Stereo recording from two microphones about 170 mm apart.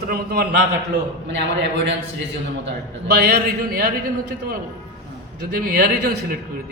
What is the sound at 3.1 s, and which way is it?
Speech, 70° right (ahead or behind).